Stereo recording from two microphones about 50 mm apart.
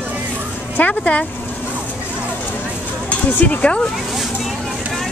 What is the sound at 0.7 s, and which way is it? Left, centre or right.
Speech, left.